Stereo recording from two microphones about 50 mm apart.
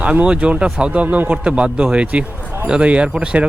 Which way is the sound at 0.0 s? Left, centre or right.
Right.